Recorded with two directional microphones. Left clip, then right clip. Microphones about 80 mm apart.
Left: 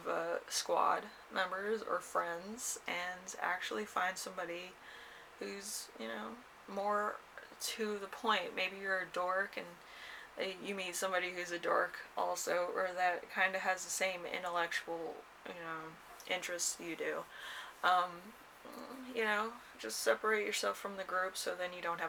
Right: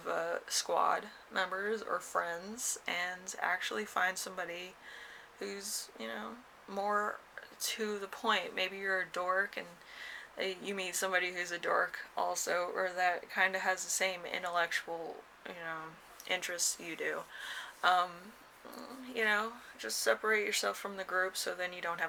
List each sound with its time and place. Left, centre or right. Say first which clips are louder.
0.0 s speech: right 2 dB; right